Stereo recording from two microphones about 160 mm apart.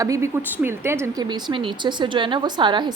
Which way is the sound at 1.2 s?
30° right (ahead or behind).